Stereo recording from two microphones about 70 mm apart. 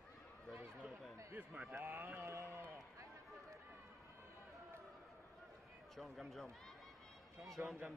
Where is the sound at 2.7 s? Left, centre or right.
Right.